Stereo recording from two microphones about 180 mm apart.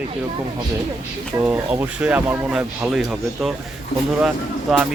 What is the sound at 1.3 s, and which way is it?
Speech, 15° right (ahead or behind).